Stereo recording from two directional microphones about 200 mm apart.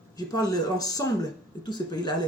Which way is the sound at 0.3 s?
20° left (ahead or behind).